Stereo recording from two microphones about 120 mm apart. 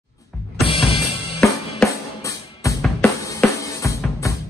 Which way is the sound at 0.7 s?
45° left (ahead or behind).